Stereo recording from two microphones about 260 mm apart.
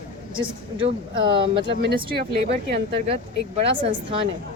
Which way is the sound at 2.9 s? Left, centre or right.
Right.